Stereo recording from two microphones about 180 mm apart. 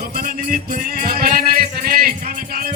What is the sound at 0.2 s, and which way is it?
Music, 50° right (ahead or behind).